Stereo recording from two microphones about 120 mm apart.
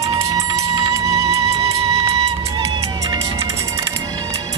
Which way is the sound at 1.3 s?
55° right (ahead or behind).